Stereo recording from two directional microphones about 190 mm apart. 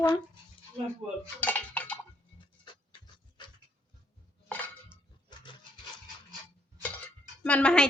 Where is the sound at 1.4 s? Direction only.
10° left (ahead or behind).